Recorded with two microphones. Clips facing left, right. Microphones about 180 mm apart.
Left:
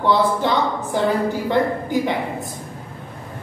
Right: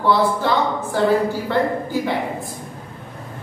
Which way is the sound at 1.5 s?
15° left (ahead or behind).